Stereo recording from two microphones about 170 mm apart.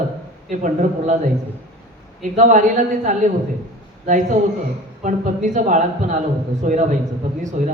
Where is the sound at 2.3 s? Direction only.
50° right (ahead or behind).